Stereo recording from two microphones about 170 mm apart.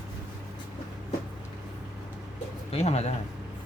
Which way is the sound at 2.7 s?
40° left (ahead or behind).